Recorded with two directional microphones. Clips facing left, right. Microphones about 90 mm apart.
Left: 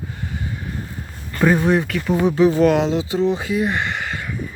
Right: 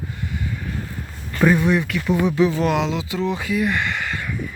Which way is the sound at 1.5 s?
35° left (ahead or behind).